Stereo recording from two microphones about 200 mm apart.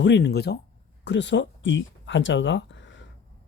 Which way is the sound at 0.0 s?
60° left (ahead or behind).